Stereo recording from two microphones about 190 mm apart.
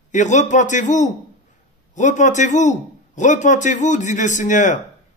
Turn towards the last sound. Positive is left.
turn(degrees=40)  # may be behind; listen again after turning